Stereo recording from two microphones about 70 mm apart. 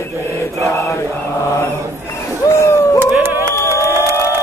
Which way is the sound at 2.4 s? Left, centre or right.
Left.